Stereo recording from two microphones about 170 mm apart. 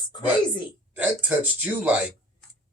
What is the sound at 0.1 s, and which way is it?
Speech, 25° left (ahead or behind).